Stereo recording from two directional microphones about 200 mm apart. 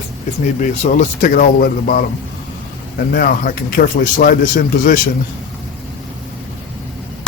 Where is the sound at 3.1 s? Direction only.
45° left (ahead or behind).